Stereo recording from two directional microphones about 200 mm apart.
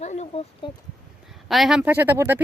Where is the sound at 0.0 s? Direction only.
35° left (ahead or behind).